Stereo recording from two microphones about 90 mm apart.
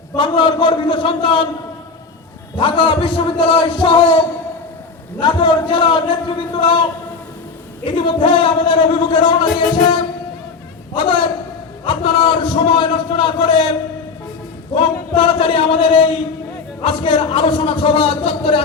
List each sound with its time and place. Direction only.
0.2 s a man's voice: 65° left (ahead or behind)
2.6 s a man's voice: 65° left (ahead or behind)
5.2 s a man's voice: 65° left (ahead or behind)
7.9 s a man's voice: 80° left
10.9 s a sound: 85° left
11.9 s a man's voice: 75° left (ahead or behind)
14.8 s a man's voice: 80° left